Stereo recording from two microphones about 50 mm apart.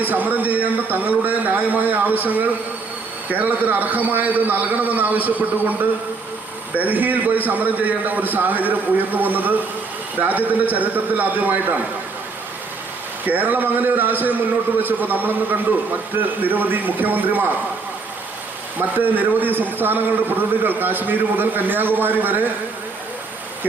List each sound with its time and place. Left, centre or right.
0.0 s a man's voice: right
13.2 s a man's voice: right
18.8 s a man's voice: right